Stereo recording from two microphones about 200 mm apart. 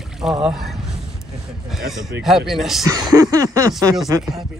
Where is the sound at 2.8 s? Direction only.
20° right (ahead or behind).